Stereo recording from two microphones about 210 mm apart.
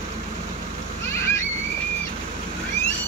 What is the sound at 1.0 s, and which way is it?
Splash, 10° left (ahead or behind).